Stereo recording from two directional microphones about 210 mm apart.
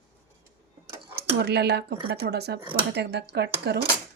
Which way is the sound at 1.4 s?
50° right (ahead or behind).